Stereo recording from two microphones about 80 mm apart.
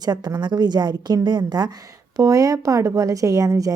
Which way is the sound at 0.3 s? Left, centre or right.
Right.